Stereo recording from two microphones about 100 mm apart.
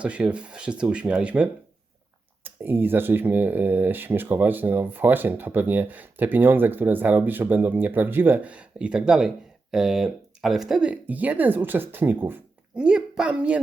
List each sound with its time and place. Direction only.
0.0 s speech: 10° right (ahead or behind)
12.7 s a woman's voice: 10° right (ahead or behind)